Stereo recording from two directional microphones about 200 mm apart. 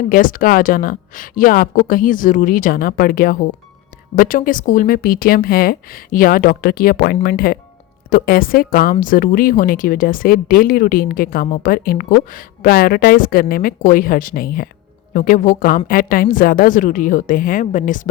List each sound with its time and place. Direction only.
0.1 s a woman's voice: 45° left (ahead or behind)